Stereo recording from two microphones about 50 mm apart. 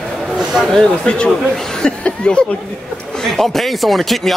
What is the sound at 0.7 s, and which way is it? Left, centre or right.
Speech, centre.